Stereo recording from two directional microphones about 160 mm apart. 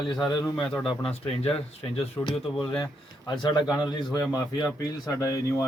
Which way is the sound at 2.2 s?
20° left (ahead or behind).